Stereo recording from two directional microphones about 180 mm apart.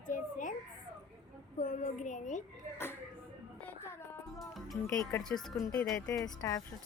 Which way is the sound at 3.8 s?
15° left (ahead or behind).